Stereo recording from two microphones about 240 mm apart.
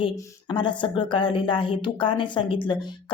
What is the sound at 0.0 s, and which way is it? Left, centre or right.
Speech, centre.